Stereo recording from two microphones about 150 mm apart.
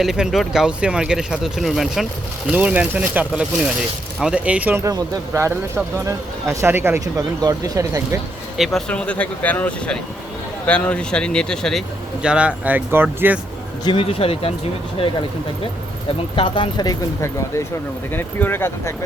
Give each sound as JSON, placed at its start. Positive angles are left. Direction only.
{"t": 0.0, "sound": "speech", "side_deg": -5}
{"t": 8.5, "sound": "speech", "side_deg": 0}
{"t": 12.2, "sound": "speech", "side_deg": -5}
{"t": 13.8, "sound": "speech", "side_deg": 35}
{"t": 16.3, "sound": "speech", "side_deg": 35}